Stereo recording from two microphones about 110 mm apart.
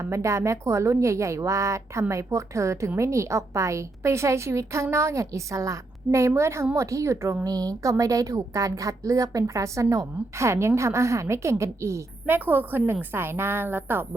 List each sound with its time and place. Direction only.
0.0 s a woman's voice: 25° right (ahead or behind)